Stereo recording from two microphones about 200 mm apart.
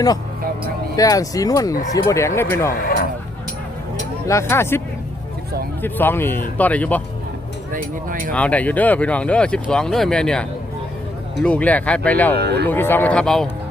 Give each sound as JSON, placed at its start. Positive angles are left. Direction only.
{"t": 0.9, "sound": "speech", "side_deg": 15}
{"t": 2.8, "sound": "music", "side_deg": 45}
{"t": 4.3, "sound": "speech", "side_deg": 15}
{"t": 5.8, "sound": "speech", "side_deg": 10}
{"t": 7.7, "sound": "speech", "side_deg": -40}
{"t": 8.3, "sound": "speech", "side_deg": 5}
{"t": 12.4, "sound": "speech", "side_deg": -55}
{"t": 12.6, "sound": "speech", "side_deg": 10}